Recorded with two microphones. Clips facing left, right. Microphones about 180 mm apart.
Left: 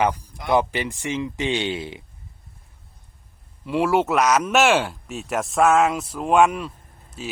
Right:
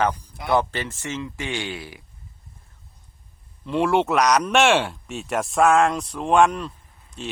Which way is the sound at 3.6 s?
5° left (ahead or behind).